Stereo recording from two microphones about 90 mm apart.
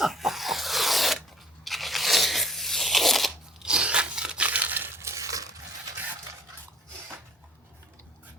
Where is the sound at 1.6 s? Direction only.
Centre (ahead or behind); by 5.5 s 40° right (ahead or behind).